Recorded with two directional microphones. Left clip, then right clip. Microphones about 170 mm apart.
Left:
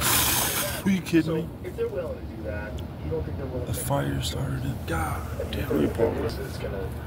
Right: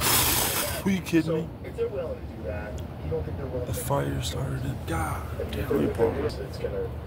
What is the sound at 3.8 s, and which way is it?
Speech, 5° right (ahead or behind).